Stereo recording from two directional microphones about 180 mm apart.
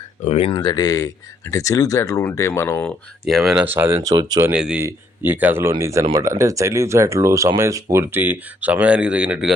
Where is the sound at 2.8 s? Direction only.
Centre (ahead or behind); by 4.5 s 20° right (ahead or behind).